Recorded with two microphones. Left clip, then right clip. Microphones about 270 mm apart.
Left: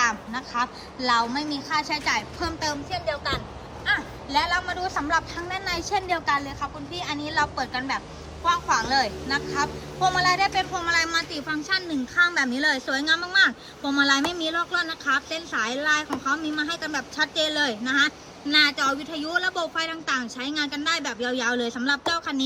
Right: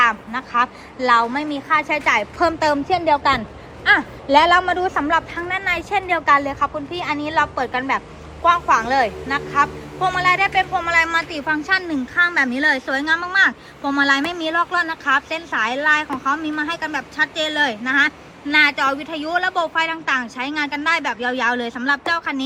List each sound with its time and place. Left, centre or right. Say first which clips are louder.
0.0 s a woman's voice: right 7 dB; centre
4.4 s a woman's voice: right 10 dB; centre
12.9 s speech: right 4 dB; centre
14.1 s a woman's voice: right 5 dB; centre